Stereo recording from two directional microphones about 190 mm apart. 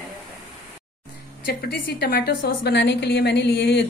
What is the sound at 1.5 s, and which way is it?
A woman's voice, 55° left (ahead or behind).